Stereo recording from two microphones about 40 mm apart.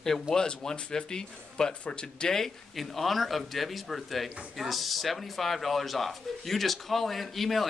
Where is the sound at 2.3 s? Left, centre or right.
Centre.